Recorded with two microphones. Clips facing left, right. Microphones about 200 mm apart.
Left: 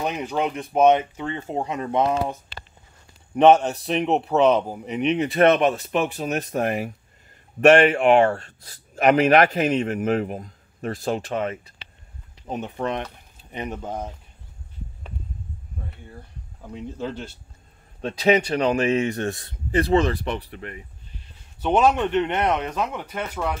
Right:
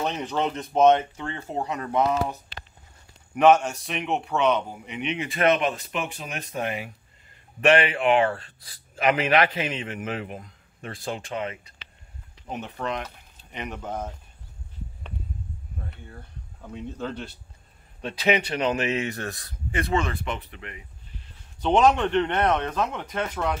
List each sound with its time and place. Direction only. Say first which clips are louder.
0.0 s speech: left 2 dB; 10° left (ahead or behind)
3.3 s a man's voice: left 3 dB; 35° left (ahead or behind)
12.5 s speech: left 4 dB; 20° left (ahead or behind)
13.5 s speech: left 4 dB; 35° left (ahead or behind)
13.8 s speech: left 1 dB; 15° left (ahead or behind)
18.0 s speech: left 5 dB; 35° left (ahead or behind)
21.6 s speech: even; 5° left (ahead or behind)